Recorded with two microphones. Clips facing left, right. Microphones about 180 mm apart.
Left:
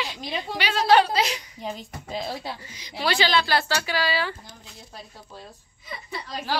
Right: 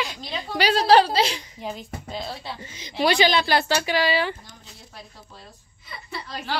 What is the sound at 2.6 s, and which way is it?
Speech, 25° right (ahead or behind).